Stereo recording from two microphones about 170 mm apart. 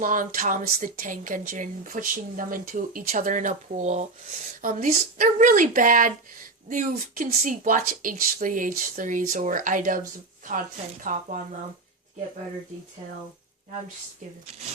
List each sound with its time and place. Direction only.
0.0 s speech: 50° right (ahead or behind)
11.0 s speech: 50° right (ahead or behind)